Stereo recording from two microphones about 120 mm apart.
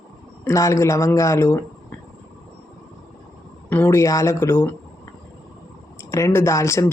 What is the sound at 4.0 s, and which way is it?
Speech, 25° left (ahead or behind).